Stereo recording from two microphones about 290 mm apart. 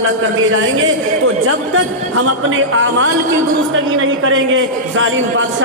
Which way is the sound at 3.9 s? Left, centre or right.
Right.